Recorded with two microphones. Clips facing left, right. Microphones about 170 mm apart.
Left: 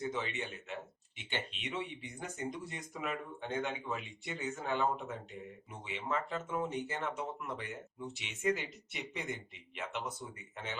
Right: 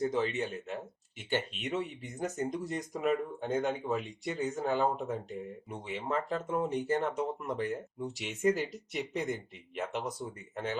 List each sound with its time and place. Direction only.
0.0 s speech: 40° right (ahead or behind)